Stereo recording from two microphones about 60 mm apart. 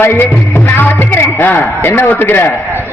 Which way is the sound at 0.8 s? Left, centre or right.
Left.